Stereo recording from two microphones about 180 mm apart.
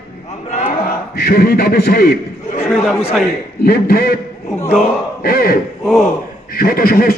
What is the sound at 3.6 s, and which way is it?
Speech, 60° left (ahead or behind).